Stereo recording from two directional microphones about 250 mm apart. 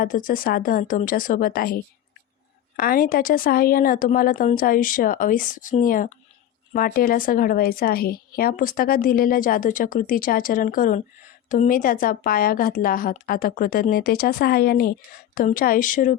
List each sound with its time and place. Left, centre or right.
0.0 s a woman's voice: left